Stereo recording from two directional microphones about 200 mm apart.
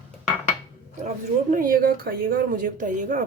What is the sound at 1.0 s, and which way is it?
Speech, 45° right (ahead or behind).